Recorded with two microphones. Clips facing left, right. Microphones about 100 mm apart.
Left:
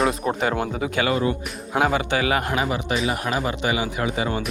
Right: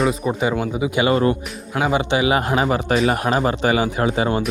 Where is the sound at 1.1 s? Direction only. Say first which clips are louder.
Right 6 dB; 45° right (ahead or behind).